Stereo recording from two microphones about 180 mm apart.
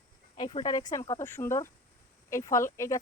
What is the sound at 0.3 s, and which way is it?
Speech, 25° left (ahead or behind).